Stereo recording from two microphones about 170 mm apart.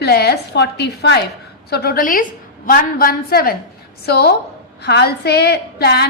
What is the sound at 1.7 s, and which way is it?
A woman's voice, 65° left (ahead or behind).